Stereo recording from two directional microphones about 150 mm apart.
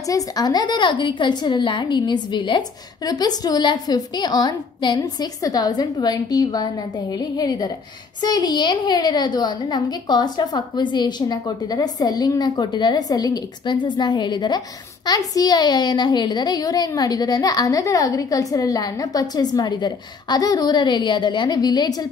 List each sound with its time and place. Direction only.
0.1 s a woman's voice: 25° left (ahead or behind)